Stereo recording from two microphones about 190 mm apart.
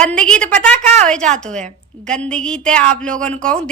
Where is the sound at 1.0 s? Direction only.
5° left (ahead or behind).